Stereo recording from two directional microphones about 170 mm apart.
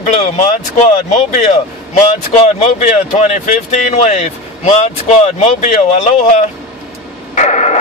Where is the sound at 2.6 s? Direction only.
40° left (ahead or behind).